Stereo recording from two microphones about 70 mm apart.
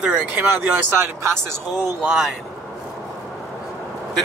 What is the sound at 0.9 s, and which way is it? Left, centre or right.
Speech, right.